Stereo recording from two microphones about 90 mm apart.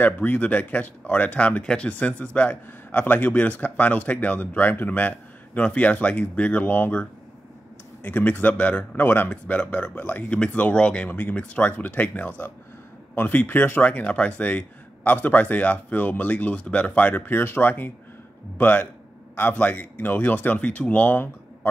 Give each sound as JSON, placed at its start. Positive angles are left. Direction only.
{"t": 0.0, "sound": "speech", "side_deg": 20}